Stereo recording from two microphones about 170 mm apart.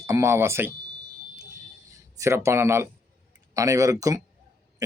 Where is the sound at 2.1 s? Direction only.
15° right (ahead or behind).